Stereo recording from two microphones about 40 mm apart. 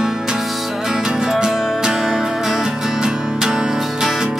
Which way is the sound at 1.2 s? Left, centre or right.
Centre.